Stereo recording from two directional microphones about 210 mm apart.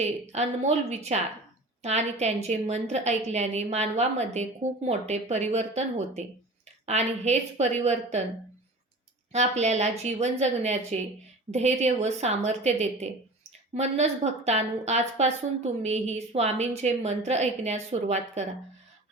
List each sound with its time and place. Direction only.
0.0 s a woman's voice: 30° right (ahead or behind)
9.3 s a woman's voice: 30° right (ahead or behind)